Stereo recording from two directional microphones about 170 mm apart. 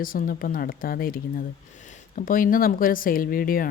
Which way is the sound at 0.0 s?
55° left (ahead or behind).